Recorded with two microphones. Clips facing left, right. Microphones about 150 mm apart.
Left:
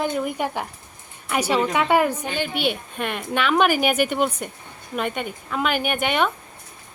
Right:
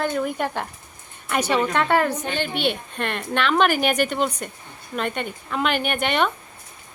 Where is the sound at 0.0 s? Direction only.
15° left (ahead or behind).